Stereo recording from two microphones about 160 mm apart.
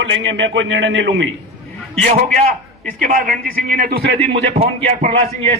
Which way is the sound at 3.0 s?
60° right (ahead or behind).